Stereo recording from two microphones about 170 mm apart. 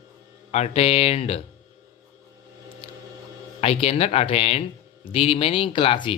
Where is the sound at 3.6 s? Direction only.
35° left (ahead or behind).